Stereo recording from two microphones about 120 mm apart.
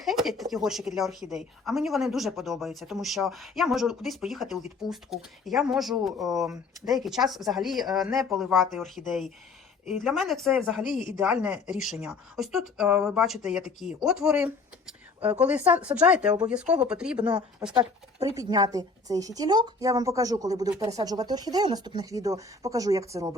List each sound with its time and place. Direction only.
0.0 s a woman's voice: centre (ahead or behind)
17.6 s speech: 25° right (ahead or behind)